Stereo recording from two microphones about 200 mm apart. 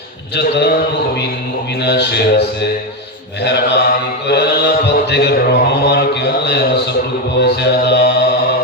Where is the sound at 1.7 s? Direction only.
60° left (ahead or behind).